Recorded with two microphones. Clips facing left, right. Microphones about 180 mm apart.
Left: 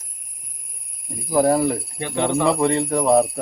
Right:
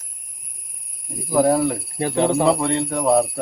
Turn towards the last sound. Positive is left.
turn(degrees=0)  # may be behind; listen again after turning